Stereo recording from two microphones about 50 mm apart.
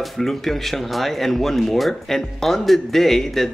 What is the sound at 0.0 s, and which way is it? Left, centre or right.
Speech, centre.